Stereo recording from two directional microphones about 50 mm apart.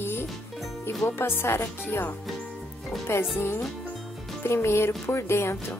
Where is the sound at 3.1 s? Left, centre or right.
Left.